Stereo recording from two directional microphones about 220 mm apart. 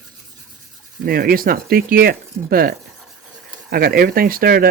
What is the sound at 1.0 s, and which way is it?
Speech, 45° right (ahead or behind).